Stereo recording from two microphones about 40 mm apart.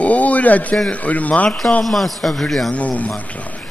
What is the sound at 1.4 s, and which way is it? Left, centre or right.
A man's voice, centre.